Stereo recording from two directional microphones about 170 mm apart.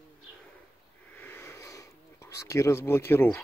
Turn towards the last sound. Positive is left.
turn(degrees=15)  # may be behind; listen again after turning